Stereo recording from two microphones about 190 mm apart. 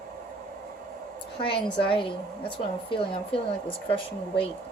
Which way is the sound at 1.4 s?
25° left (ahead or behind).